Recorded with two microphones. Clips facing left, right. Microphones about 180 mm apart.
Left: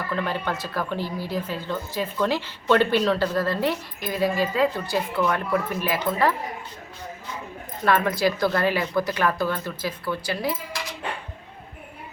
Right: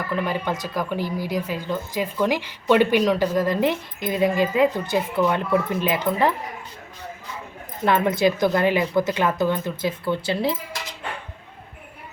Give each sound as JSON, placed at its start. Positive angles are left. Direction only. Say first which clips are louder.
{"t": 0.1, "sound": "speech", "louder": "right 2 dB", "side_deg": -10}
{"t": 7.9, "sound": "speech", "louder": "right 2 dB", "side_deg": -20}